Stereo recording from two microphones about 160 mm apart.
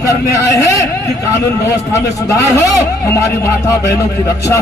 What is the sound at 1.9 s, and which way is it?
Speech, 20° left (ahead or behind).